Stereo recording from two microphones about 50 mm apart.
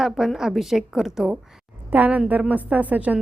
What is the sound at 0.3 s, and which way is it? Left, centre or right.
Speech, centre.